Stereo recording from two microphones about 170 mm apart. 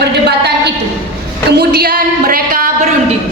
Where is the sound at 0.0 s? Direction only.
80° right; by 2.6 s 55° right (ahead or behind).